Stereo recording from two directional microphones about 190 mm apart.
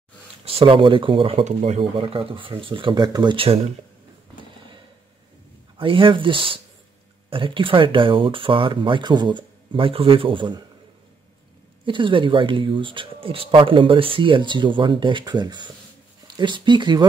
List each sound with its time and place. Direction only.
0.6 s speech: 25° right (ahead or behind)
5.8 s speech: 25° right (ahead or behind)
11.8 s speech: 25° right (ahead or behind)